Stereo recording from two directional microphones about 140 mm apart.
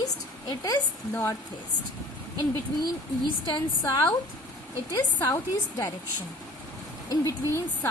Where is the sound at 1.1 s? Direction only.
15° left (ahead or behind).